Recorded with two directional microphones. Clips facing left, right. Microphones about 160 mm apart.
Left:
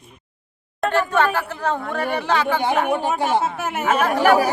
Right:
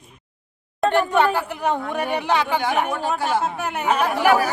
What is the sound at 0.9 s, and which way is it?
Speech, 15° right (ahead or behind).